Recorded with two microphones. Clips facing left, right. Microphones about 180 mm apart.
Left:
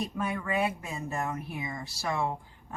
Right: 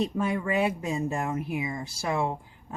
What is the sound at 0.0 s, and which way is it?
Speech, 25° right (ahead or behind).